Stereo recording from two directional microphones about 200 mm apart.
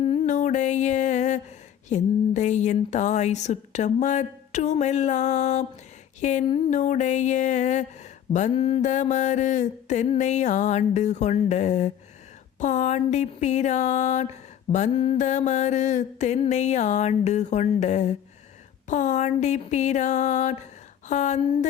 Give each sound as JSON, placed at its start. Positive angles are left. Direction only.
{"t": 0.0, "sound": "music", "side_deg": 30}
{"t": 1.9, "sound": "speech", "side_deg": 35}